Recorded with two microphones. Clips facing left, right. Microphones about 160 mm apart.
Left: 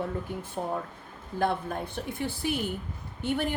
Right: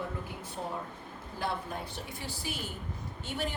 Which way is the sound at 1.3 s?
55° left (ahead or behind).